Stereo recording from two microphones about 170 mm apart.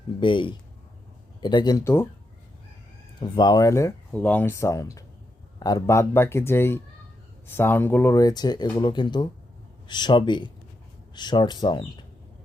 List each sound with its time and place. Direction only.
0.2 s speech: 30° left (ahead or behind); by 2.0 s 15° left (ahead or behind)
3.2 s speech: 25° left (ahead or behind)